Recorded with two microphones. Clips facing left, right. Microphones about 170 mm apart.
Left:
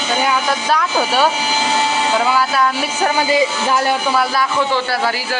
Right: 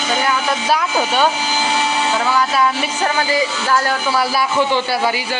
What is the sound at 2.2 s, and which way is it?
Speech, 10° left (ahead or behind).